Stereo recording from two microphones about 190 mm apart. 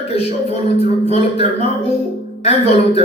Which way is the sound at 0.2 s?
35° left (ahead or behind).